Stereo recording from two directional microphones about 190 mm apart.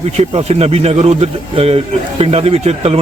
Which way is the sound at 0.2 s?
35° right (ahead or behind).